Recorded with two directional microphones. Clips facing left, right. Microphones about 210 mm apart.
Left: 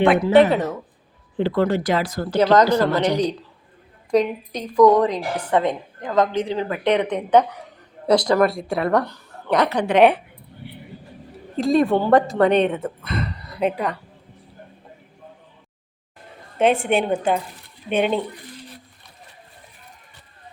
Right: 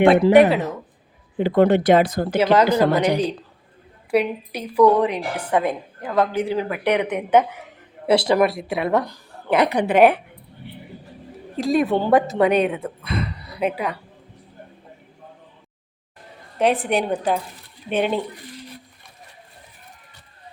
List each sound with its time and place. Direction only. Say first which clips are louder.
0.3 s a woman's voice: right 1 dB; 15° right (ahead or behind)
11.5 s a woman's voice: left 2 dB; 5° right (ahead or behind)
11.9 s a woman's voice: left 1 dB; 15° right (ahead or behind)
12.3 s speech: left 1 dB; 5° right (ahead or behind)
16.6 s a woman's voice: left 1 dB; centre (ahead or behind)